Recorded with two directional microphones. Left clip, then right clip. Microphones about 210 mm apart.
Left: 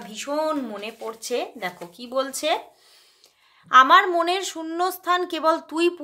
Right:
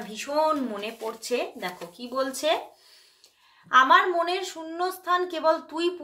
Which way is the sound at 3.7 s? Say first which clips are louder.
Left 4 dB; 30° left (ahead or behind).